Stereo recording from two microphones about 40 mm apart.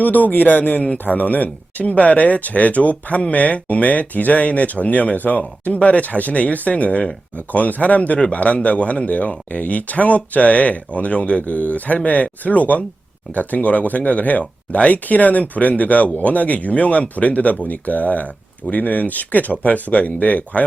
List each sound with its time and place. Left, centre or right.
0.0 s speech: left